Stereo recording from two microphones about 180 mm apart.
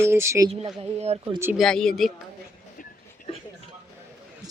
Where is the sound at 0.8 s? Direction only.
35° right (ahead or behind).